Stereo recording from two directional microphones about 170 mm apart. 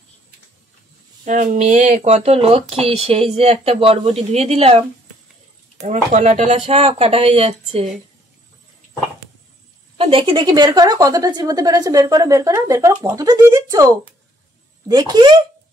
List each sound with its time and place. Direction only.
1.2 s speech: 45° right (ahead or behind)
5.9 s speech: 45° right (ahead or behind)
9.9 s speech: 35° right (ahead or behind)